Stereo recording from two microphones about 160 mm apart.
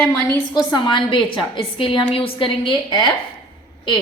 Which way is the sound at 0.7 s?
30° left (ahead or behind).